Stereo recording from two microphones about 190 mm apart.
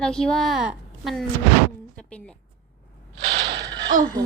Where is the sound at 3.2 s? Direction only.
65° right (ahead or behind).